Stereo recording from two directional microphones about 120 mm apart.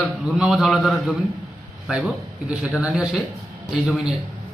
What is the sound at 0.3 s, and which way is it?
A man's voice, 5° right (ahead or behind).